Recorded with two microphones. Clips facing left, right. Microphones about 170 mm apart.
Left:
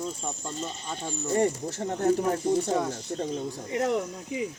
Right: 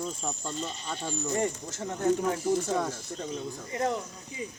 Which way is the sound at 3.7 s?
80° left.